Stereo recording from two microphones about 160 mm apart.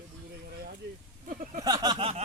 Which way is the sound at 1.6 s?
25° right (ahead or behind).